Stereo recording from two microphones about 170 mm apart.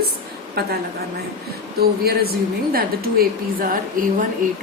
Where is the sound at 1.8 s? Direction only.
65° right (ahead or behind).